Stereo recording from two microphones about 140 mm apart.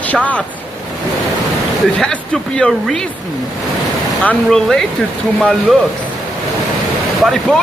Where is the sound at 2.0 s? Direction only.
5° left (ahead or behind).